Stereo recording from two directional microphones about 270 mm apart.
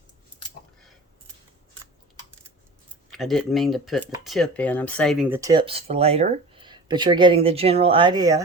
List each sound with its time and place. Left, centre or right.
3.1 s speech: centre